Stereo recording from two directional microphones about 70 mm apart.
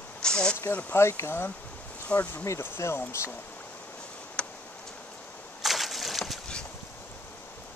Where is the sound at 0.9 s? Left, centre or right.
Left.